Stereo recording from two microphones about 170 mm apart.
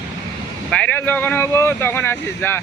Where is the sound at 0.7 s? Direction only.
5° left (ahead or behind).